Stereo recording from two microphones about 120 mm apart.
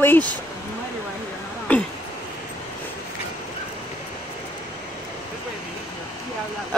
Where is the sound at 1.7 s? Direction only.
15° left (ahead or behind).